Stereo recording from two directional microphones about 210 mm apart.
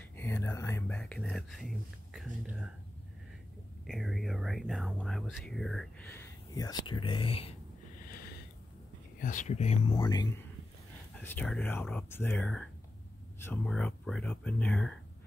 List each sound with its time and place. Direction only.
0.1 s whispering: 10° left (ahead or behind)
2.1 s speech: 5° right (ahead or behind)
3.8 s whispering: centre (ahead or behind); by 7.5 s 25° left (ahead or behind)
9.2 s speech: 35° left (ahead or behind); by 10.4 s 20° left (ahead or behind)
11.1 s speech: 10° left (ahead or behind)